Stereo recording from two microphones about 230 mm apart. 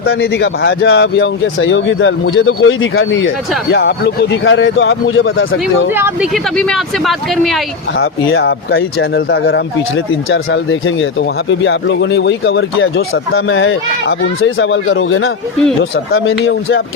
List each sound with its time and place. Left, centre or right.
0.0 s speech: left
5.9 s speech: centre
6.6 s speech: centre
7.9 s speech: left